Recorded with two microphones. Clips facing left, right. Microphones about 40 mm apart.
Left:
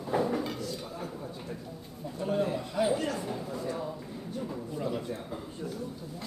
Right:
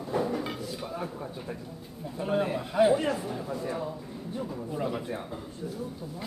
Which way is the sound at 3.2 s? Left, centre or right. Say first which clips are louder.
Right 1 dB; centre.